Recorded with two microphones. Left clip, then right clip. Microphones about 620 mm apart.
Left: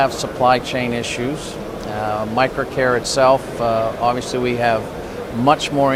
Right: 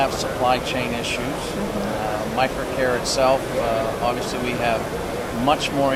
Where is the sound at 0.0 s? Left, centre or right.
Left.